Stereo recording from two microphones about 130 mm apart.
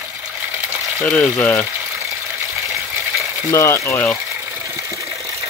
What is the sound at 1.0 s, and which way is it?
Speech, 5° left (ahead or behind).